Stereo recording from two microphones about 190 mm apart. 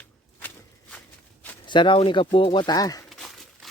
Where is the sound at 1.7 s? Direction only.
25° left (ahead or behind).